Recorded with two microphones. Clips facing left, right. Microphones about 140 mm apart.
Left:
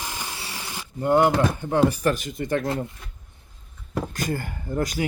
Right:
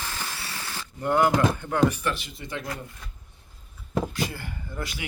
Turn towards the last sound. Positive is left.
turn(degrees=45)  # may be behind; listen again after turning